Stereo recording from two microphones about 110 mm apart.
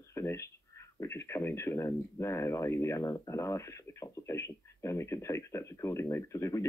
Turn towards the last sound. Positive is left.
turn(degrees=30)  # may be behind; listen again after turning